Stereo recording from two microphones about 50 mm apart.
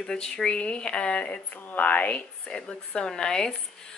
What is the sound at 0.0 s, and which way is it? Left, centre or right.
Speech, centre.